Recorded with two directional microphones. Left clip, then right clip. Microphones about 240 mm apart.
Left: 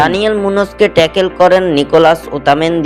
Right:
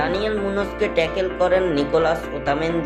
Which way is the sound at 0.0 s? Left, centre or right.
Left.